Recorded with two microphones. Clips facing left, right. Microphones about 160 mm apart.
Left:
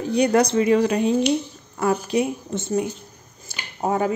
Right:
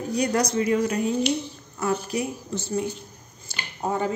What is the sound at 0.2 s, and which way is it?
Speech, 65° left (ahead or behind).